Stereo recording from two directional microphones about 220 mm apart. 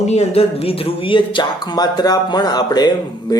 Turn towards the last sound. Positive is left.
turn(degrees=20)  # may be behind; listen again after turning